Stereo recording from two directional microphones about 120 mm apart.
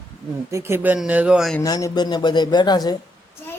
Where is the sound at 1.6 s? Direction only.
30° left (ahead or behind).